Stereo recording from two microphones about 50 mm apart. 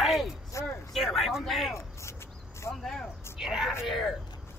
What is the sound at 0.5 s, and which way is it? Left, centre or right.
Speech, left.